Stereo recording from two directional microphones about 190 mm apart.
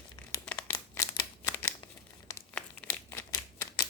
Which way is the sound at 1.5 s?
15° left (ahead or behind).